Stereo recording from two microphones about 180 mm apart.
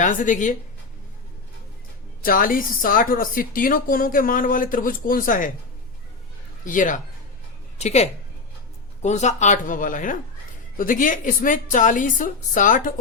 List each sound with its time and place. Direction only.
0.0 s a woman's voice: 45° left (ahead or behind)
2.2 s a woman's voice: 50° left (ahead or behind)
6.7 s a woman's voice: 45° left (ahead or behind)